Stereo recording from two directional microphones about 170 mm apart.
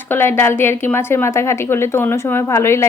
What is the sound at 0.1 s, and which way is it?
A woman's voice, 15° left (ahead or behind).